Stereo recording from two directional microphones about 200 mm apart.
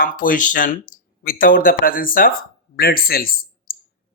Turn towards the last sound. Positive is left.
turn(degrees=45)  # may be behind; listen again after turning